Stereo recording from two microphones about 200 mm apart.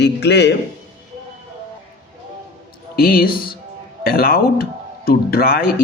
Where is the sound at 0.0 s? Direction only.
55° left (ahead or behind).